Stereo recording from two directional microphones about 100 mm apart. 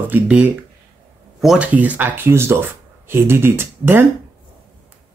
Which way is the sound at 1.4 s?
5° right (ahead or behind).